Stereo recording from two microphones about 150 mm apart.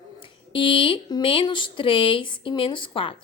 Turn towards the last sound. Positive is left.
turn(degrees=35)  # may be behind; listen again after turning